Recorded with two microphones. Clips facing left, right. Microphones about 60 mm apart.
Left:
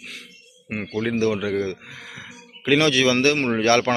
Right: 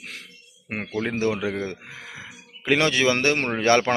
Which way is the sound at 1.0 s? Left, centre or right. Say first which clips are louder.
Left 3 dB; centre.